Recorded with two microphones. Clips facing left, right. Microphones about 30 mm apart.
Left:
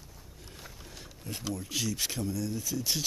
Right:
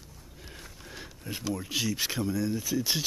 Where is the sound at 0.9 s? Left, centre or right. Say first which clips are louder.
Right 4 dB; centre.